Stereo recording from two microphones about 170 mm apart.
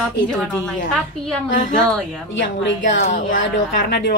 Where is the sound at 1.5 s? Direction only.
50° left (ahead or behind).